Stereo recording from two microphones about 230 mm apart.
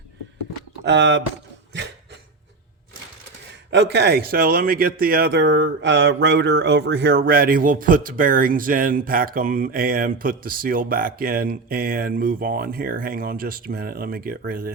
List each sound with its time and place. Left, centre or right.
0.9 s speech: right
3.7 s speech: right